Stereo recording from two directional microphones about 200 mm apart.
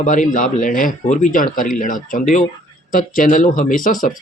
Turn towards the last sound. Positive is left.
turn(degrees=40)  # may be behind; listen again after turning